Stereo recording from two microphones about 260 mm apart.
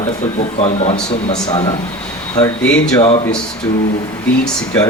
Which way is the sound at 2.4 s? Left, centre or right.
Centre.